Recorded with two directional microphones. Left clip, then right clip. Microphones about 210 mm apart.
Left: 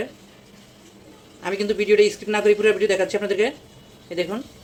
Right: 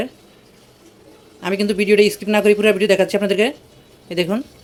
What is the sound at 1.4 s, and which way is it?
Speech, 40° right (ahead or behind).